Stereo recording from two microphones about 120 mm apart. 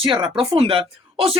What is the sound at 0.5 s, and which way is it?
Speech, 50° right (ahead or behind).